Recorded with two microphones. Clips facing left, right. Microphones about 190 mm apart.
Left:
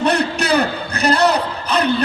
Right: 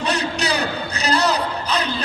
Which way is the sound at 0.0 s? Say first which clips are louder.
Left 5 dB; 60° left (ahead or behind).